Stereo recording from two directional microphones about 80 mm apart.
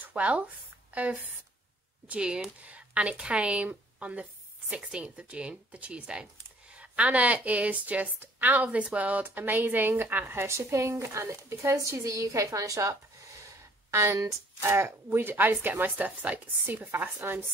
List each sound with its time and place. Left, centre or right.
0.0 s a woman's voice: centre; by 12.9 s right
13.4 s a sound: right
15.1 s a woman's voice: right